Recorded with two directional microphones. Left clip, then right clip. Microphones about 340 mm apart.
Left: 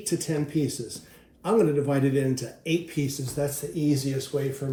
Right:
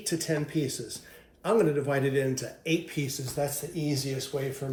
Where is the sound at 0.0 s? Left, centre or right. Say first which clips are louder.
Left 2 dB; centre.